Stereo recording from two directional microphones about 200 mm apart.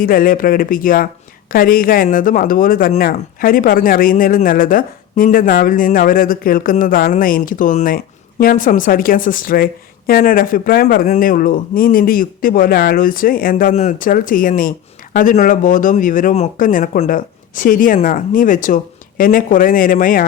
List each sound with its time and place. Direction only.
0.0 s speech: 45° left (ahead or behind)